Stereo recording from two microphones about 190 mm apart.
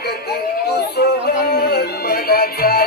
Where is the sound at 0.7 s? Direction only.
60° left (ahead or behind).